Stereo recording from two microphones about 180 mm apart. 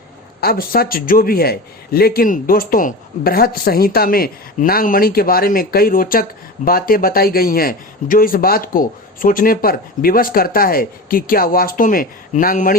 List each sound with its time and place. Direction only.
0.4 s a man's voice: 55° left (ahead or behind)